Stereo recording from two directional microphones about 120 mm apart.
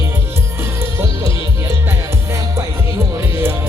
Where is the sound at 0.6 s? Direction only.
20° right (ahead or behind).